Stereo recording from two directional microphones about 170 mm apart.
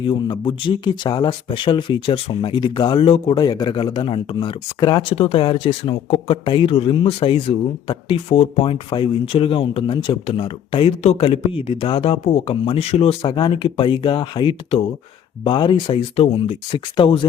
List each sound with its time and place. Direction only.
0.0 s speech: 30° left (ahead or behind)